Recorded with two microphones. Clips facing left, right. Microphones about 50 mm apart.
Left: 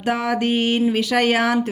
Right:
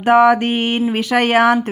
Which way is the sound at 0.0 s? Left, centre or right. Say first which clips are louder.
Right 9 dB; right.